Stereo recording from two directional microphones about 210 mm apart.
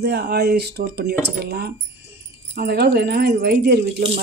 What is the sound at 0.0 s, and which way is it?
Speech, 50° right (ahead or behind).